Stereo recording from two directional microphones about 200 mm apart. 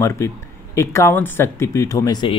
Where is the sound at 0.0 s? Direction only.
15° left (ahead or behind).